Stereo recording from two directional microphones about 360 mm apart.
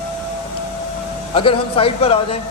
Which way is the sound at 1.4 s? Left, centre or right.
Centre.